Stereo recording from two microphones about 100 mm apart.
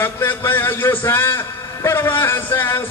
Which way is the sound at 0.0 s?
20° left (ahead or behind).